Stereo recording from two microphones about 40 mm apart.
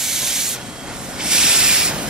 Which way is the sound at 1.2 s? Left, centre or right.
Centre.